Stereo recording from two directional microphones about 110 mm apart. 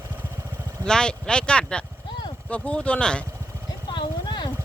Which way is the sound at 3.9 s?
45° left (ahead or behind).